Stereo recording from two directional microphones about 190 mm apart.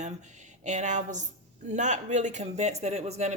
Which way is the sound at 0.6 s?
40° right (ahead or behind).